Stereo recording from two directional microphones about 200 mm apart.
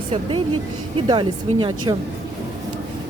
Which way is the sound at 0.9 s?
25° right (ahead or behind).